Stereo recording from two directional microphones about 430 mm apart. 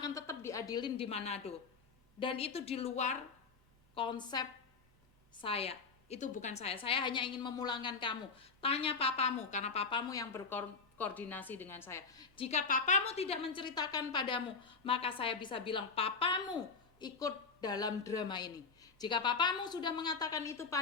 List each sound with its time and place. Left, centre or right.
0.0 s a woman's voice: centre